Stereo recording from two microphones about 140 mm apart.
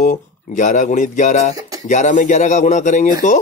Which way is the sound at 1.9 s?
60° left (ahead or behind).